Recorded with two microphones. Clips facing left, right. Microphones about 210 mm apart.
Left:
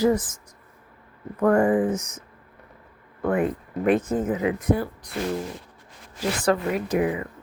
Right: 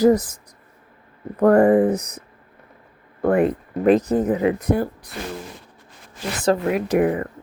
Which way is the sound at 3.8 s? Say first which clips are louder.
Right 5 dB; 35° right (ahead or behind).